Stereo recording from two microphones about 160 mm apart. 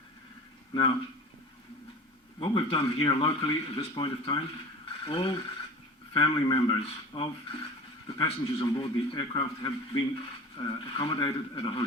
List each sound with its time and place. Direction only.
0.7 s speech: 30° left (ahead or behind)
2.4 s a man's voice: 35° left (ahead or behind)